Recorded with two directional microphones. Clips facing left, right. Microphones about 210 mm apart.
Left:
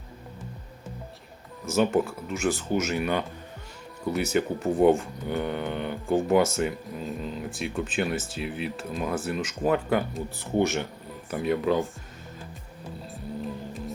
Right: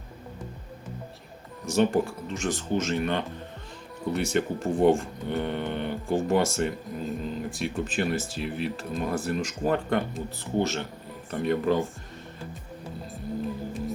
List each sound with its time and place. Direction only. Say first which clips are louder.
1.6 s speech: even; centre (ahead or behind)
10.3 s speech: left 2 dB; 15° left (ahead or behind)
11.3 s speech: even; centre (ahead or behind)
13.1 s music: right 3 dB; centre (ahead or behind)